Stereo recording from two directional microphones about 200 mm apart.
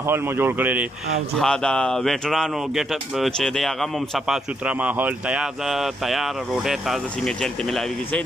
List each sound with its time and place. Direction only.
0.0 s speech: 10° right (ahead or behind)
1.4 s speech: 5° left (ahead or behind)